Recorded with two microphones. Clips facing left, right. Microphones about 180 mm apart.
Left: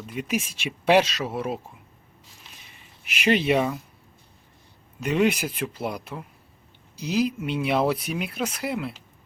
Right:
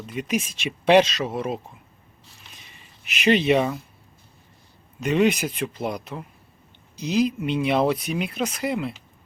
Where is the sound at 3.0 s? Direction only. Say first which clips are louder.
Right 2 dB; 10° left (ahead or behind).